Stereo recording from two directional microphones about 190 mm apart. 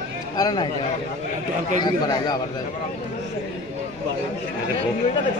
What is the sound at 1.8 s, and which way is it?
Speech, 20° left (ahead or behind).